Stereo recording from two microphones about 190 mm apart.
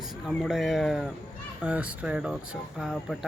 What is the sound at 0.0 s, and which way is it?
Speech, centre (ahead or behind).